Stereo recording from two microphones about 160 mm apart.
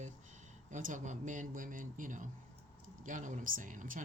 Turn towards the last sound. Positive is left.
turn(degrees=-55)  # may be behind; listen again after turning